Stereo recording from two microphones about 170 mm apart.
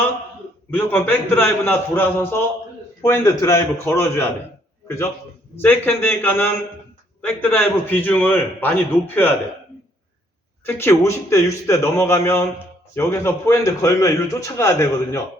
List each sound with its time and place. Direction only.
0.7 s a man's voice: 10° left (ahead or behind)
5.6 s a man's voice: 10° left (ahead or behind)
10.7 s a man's voice: 15° left (ahead or behind)